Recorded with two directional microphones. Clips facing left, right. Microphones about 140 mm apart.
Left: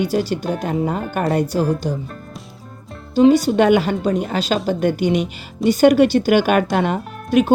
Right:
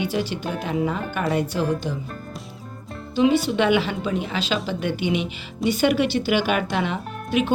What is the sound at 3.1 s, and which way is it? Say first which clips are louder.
A woman's voice: left 6 dB; 40° left (ahead or behind).